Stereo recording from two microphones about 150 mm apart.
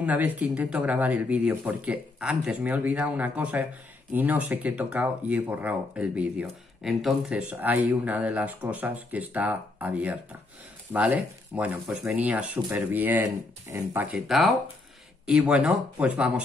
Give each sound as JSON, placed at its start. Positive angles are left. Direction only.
{"t": 0.0, "sound": "speech", "side_deg": -10}
{"t": 14.1, "sound": "speech", "side_deg": 0}